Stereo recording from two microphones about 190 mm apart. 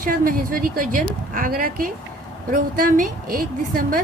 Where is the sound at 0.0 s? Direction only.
50° right (ahead or behind).